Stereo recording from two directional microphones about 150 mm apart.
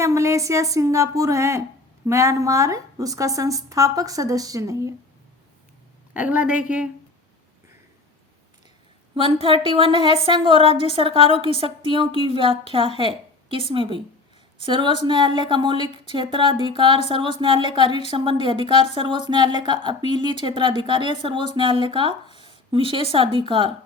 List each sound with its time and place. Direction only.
0.0 s a woman's voice: 20° right (ahead or behind)
6.1 s a woman's voice: 10° right (ahead or behind)
9.1 s speech: 35° right (ahead or behind)